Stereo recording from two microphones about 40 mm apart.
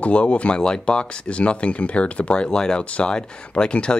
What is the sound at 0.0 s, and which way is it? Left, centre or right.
Speech, left.